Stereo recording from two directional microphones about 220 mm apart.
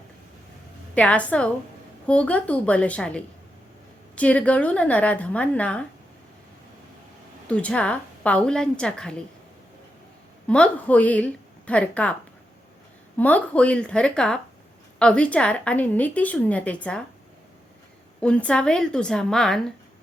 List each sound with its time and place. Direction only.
0.9 s a woman's voice: 5° left (ahead or behind)
7.4 s a woman's voice: 5° left (ahead or behind)
10.4 s a woman's voice: 5° left (ahead or behind)
13.1 s a woman's voice: 5° left (ahead or behind)
18.2 s a woman's voice: 5° left (ahead or behind)